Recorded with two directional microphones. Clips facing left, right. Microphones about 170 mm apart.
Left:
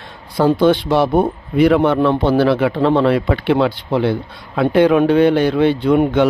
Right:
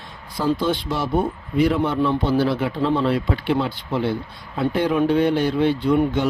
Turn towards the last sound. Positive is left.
turn(degrees=75)  # may be behind; listen again after turning